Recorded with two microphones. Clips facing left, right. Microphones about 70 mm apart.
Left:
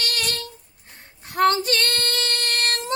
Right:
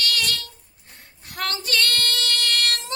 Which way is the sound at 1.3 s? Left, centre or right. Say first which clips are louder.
Left 9 dB; left.